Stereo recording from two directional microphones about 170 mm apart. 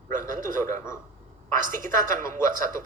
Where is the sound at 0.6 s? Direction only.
15° left (ahead or behind).